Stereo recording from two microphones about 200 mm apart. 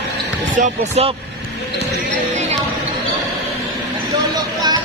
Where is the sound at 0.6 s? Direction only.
30° right (ahead or behind).